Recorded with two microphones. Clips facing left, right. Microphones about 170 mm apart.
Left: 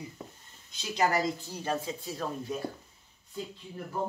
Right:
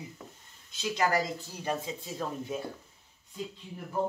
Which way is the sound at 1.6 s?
20° right (ahead or behind).